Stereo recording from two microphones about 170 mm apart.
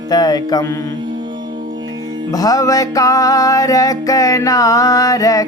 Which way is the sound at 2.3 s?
20° left (ahead or behind).